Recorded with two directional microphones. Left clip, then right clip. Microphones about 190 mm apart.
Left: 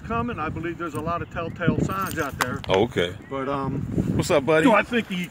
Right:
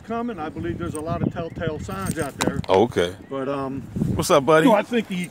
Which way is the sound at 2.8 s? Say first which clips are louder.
Right 3 dB; 20° right (ahead or behind).